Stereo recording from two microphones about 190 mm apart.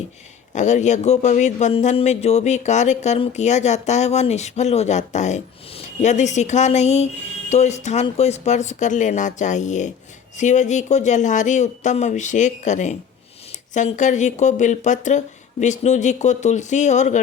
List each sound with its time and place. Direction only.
0.5 s a man's voice: 40° left (ahead or behind)